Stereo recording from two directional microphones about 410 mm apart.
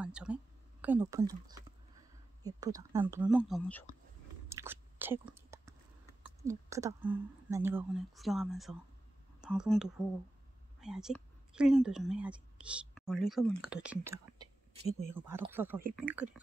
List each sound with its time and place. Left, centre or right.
0.0 s speech: centre
4.5 s chewing: centre
6.2 s a woman's voice: centre
14.9 s speech: centre
15.1 s speech: centre